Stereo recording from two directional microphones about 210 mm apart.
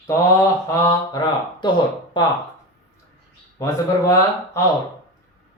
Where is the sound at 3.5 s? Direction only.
15° left (ahead or behind).